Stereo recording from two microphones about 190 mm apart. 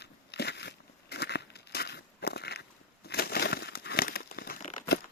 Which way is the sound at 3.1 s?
55° left (ahead or behind).